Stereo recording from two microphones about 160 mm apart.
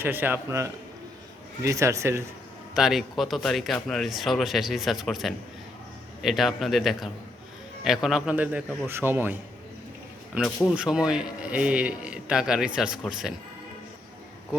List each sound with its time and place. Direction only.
0.0 s speech: 10° right (ahead or behind)
2.7 s a man's voice: centre (ahead or behind)
10.4 s a man's voice: 5° right (ahead or behind)